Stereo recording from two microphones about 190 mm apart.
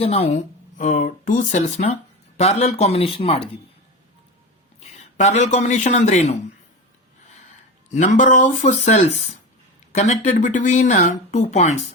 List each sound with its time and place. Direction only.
0.0 s speech: 30° left (ahead or behind)
4.8 s a man's voice: 35° left (ahead or behind)
7.9 s speech: 40° left (ahead or behind)